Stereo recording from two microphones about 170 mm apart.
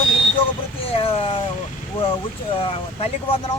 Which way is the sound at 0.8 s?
35° left (ahead or behind).